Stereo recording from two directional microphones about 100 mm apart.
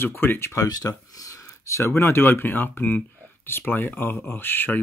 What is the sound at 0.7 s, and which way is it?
Speech, 40° left (ahead or behind).